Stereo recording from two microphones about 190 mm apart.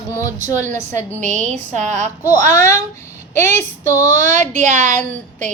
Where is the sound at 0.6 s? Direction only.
40° right (ahead or behind).